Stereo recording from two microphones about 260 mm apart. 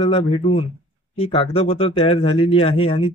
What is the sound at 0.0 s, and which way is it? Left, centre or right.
Speech, left.